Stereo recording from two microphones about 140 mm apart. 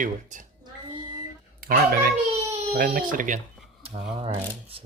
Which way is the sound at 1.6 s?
90° right.